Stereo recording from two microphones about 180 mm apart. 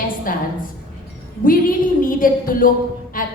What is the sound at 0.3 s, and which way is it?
Speech, 50° left (ahead or behind).